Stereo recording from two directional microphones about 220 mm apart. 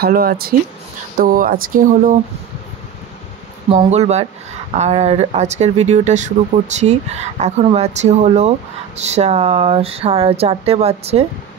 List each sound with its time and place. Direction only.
0.0 s speech: 45° right (ahead or behind)
3.7 s speech: 30° right (ahead or behind)